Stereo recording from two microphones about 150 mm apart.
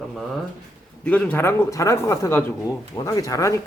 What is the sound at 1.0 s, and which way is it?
A man's voice, 10° left (ahead or behind).